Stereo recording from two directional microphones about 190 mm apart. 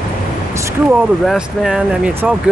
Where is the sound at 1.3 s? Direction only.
5° right (ahead or behind).